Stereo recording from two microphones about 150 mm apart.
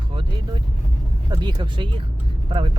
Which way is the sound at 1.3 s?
30° right (ahead or behind).